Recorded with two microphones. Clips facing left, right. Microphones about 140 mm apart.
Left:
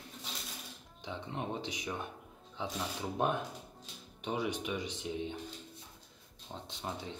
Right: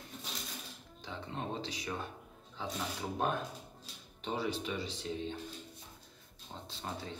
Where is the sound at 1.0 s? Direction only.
15° left (ahead or behind).